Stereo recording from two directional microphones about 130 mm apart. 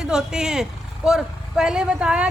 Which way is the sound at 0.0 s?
5° right (ahead or behind).